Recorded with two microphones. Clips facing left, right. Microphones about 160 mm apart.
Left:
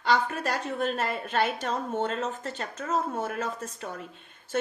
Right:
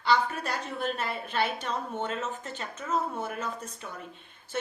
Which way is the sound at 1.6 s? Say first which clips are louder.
Left 3 dB; 40° left (ahead or behind).